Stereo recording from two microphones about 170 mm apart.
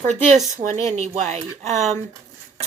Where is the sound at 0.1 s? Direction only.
45° right (ahead or behind).